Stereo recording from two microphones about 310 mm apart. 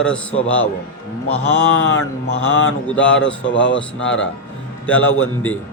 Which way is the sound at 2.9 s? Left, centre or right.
Centre.